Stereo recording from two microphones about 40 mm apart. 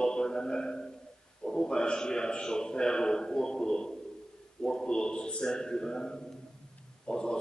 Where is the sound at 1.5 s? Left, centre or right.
Centre.